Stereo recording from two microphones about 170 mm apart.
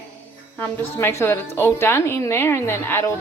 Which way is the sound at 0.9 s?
15° left (ahead or behind).